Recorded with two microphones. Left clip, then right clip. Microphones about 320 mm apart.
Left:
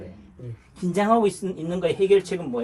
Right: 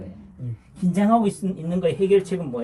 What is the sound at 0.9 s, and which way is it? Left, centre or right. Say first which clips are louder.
Speech: left 1 dB; centre.